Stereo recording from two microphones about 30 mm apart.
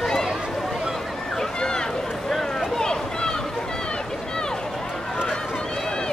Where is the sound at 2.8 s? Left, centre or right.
Left.